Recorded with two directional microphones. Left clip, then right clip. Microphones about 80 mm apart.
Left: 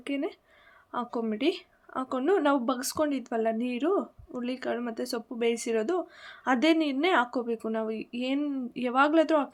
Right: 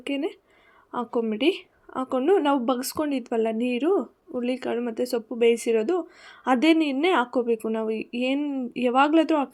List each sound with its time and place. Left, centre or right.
0.0 s speech: right
8.4 s speech: centre
8.7 s speech: right